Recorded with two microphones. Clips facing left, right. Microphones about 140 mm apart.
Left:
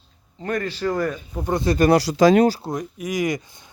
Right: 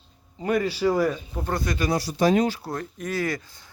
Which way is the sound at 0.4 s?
10° right (ahead or behind).